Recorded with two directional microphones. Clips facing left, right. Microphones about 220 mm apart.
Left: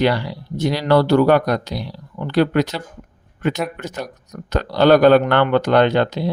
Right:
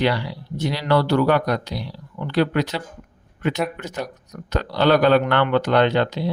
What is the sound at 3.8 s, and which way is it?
Speech, 45° left (ahead or behind).